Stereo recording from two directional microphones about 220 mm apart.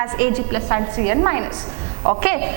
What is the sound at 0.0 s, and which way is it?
A woman's voice, 10° right (ahead or behind).